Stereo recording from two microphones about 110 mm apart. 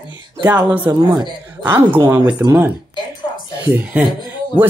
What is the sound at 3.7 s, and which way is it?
Speech, 15° right (ahead or behind).